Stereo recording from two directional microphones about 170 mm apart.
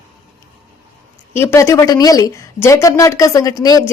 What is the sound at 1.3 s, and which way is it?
Speech, 15° left (ahead or behind).